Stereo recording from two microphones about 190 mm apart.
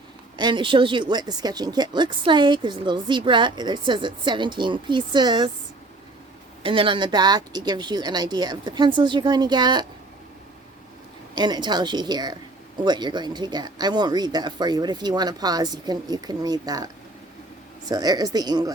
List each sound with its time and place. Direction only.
0.3 s a woman's voice: 25° right (ahead or behind)
6.6 s a woman's voice: 25° right (ahead or behind)
11.3 s a woman's voice: 20° right (ahead or behind)